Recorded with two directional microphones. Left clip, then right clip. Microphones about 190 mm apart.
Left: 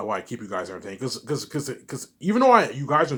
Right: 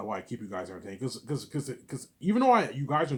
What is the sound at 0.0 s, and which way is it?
Speech, 15° left (ahead or behind).